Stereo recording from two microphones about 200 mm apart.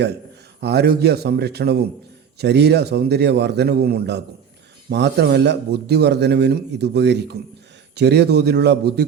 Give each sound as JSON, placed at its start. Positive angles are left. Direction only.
{"t": 0.6, "sound": "a man's voice", "side_deg": -55}